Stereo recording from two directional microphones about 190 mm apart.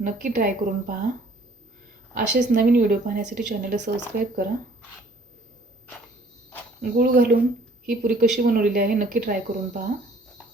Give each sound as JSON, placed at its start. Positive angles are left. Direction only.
{"t": 0.0, "sound": "speech", "side_deg": -40}
{"t": 2.1, "sound": "speech", "side_deg": -45}
{"t": 3.8, "sound": "speech", "side_deg": -60}
{"t": 6.9, "sound": "speech", "side_deg": -50}